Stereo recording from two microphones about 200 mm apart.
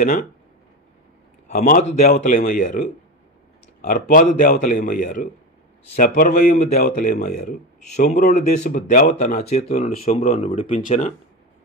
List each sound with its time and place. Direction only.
1.5 s a man's voice: 45° left (ahead or behind)